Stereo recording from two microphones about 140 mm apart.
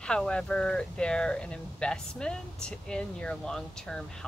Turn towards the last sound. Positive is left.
turn(degrees=5)  # may be behind; listen again after turning